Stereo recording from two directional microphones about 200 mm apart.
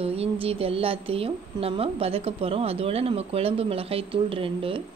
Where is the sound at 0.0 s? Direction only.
30° right (ahead or behind).